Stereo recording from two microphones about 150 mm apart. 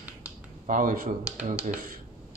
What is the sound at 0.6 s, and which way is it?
Speech, 65° right (ahead or behind).